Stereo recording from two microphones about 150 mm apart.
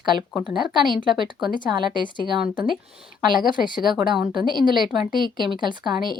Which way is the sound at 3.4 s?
65° left (ahead or behind).